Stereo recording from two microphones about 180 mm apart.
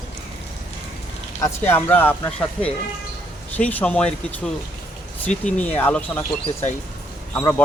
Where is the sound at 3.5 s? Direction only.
10° left (ahead or behind).